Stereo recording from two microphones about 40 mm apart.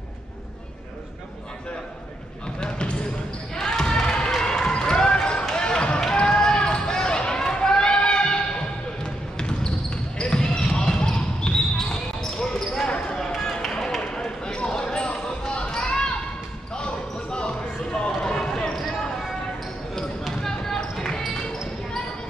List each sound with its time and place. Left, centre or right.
2.6 s basketball bounce: left
13.1 s run: centre
14.0 s basketball bounce: centre
20.0 s basketball bounce: centre